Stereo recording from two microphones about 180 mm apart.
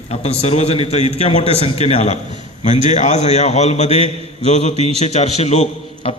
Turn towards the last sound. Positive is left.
turn(degrees=35)  # may be behind; listen again after turning